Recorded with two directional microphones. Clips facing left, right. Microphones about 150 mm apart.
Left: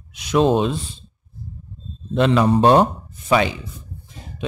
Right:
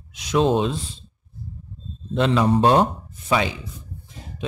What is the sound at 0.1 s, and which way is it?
Speech, 60° left (ahead or behind).